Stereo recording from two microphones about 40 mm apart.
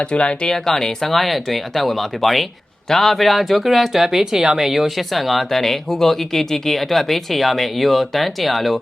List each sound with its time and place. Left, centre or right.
0.0 s speech: left
0.5 s speech: centre